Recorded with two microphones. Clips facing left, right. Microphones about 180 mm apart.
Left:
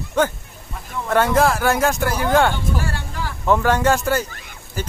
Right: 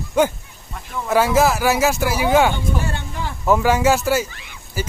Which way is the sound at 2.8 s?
20° right (ahead or behind).